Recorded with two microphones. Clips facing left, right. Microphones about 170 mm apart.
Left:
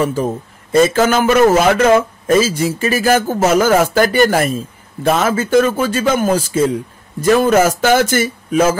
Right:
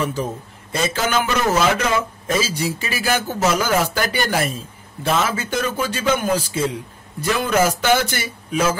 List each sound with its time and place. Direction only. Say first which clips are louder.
0.0 s a man's voice: left 6 dB; 45° left (ahead or behind)